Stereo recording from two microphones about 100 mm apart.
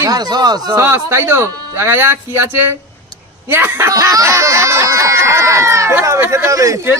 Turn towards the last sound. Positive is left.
turn(degrees=-30)  # may be behind; listen again after turning